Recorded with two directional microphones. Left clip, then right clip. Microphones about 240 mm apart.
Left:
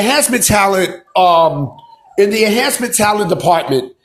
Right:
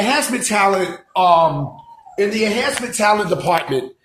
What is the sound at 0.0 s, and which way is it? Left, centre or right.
Speech, left.